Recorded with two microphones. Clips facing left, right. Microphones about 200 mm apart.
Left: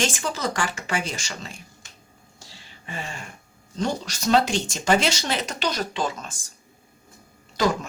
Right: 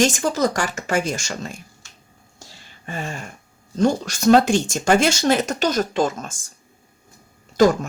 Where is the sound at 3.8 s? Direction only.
50° right (ahead or behind).